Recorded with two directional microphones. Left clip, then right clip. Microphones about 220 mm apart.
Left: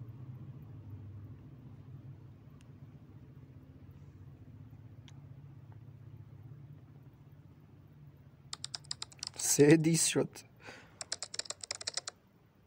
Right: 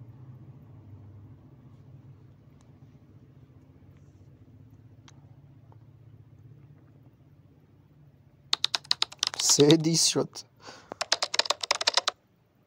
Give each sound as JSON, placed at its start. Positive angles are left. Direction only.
{"t": 8.5, "sound": "computer keyboard", "side_deg": -35}
{"t": 9.4, "sound": "speech", "side_deg": -10}
{"t": 11.0, "sound": "computer keyboard", "side_deg": -35}